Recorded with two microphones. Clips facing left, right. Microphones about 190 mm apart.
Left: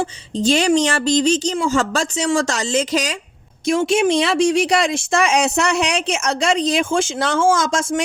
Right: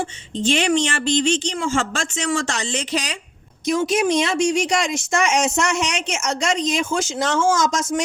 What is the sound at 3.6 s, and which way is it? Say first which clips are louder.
A woman's voice: left 3 dB; 30° left (ahead or behind).